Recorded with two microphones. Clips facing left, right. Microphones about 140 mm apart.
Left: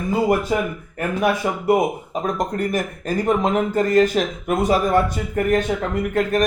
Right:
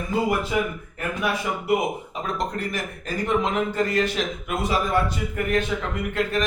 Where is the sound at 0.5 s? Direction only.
45° left (ahead or behind).